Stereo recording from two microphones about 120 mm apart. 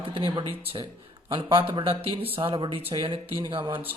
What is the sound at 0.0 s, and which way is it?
A man's voice, 50° right (ahead or behind).